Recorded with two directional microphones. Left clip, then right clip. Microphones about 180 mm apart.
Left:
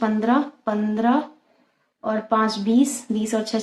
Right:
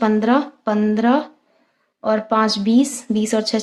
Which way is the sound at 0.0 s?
60° right (ahead or behind).